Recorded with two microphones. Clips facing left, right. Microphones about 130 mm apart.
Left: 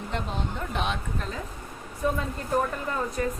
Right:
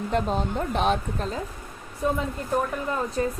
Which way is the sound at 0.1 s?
40° right (ahead or behind).